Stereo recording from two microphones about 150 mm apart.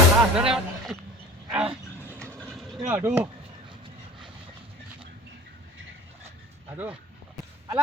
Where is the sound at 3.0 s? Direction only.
15° right (ahead or behind).